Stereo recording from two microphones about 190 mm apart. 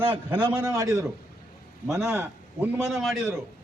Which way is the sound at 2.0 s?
15° right (ahead or behind).